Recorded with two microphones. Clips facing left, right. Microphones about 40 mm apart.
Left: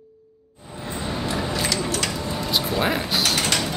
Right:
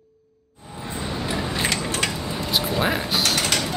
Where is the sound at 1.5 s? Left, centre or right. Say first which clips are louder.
Even; right.